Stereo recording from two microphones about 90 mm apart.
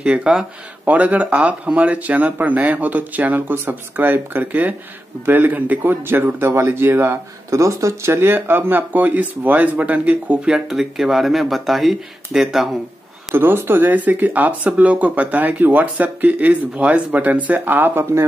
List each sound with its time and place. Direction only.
0.0 s speech: 10° right (ahead or behind)
13.4 s speech: 25° right (ahead or behind)